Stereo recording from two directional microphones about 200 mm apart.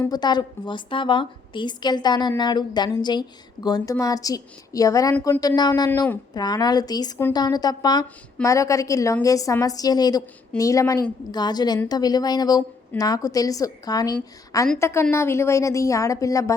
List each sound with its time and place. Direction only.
0.0 s a woman's voice: 20° left (ahead or behind)